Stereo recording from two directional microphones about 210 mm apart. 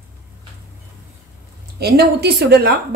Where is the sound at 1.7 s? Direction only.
50° right (ahead or behind).